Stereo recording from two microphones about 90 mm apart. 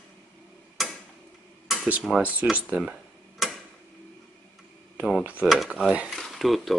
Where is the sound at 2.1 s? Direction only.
Centre (ahead or behind).